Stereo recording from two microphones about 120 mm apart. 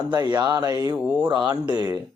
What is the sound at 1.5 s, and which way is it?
Speech, 35° right (ahead or behind).